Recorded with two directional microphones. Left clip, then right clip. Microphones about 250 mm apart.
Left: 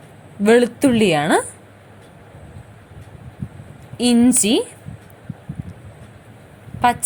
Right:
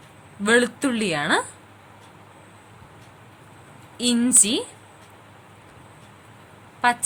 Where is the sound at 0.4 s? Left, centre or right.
Centre.